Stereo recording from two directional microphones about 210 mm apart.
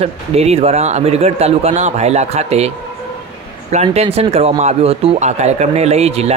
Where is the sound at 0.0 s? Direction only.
30° right (ahead or behind).